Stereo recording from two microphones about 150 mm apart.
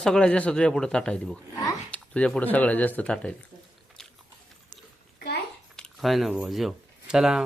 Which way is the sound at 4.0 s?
5° left (ahead or behind).